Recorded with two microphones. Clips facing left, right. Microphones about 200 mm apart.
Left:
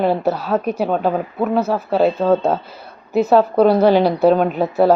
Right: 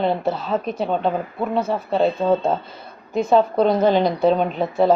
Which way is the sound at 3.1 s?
5° left (ahead or behind).